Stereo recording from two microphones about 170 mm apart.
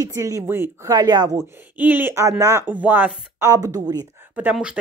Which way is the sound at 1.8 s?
10° right (ahead or behind).